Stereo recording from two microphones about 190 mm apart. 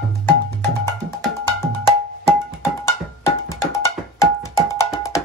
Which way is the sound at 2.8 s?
15° left (ahead or behind).